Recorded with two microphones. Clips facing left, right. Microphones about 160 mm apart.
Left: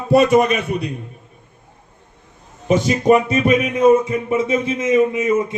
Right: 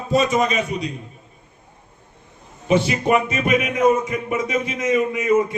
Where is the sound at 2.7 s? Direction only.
40° left (ahead or behind).